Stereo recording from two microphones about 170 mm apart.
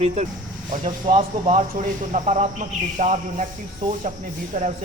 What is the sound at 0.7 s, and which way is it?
Speech, 50° right (ahead or behind).